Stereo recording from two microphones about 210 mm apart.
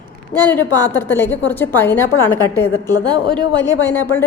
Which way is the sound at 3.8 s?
10° left (ahead or behind).